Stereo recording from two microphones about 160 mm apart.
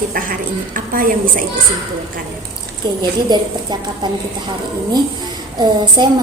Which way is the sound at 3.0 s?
25° right (ahead or behind).